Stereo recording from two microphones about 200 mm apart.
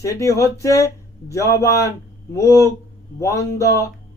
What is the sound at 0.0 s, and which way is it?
Speech, 15° left (ahead or behind).